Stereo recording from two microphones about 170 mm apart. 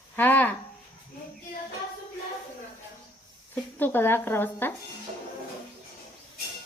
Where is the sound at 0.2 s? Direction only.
10° left (ahead or behind).